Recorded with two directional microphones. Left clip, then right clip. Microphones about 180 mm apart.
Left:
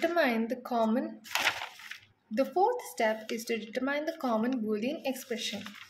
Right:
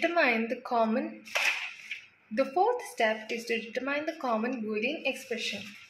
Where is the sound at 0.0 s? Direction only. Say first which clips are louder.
Right 2 dB; 20° left (ahead or behind).